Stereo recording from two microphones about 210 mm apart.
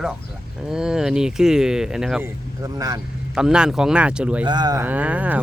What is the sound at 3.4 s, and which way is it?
Speech, 5° right (ahead or behind).